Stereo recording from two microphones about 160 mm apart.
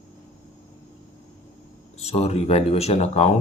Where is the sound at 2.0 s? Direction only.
40° left (ahead or behind).